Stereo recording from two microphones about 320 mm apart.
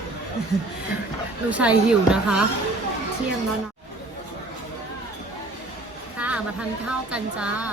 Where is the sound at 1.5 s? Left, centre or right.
Centre.